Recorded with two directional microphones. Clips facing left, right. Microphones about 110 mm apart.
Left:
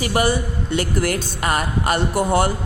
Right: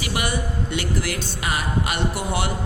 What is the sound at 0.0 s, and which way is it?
Speech, 40° left (ahead or behind).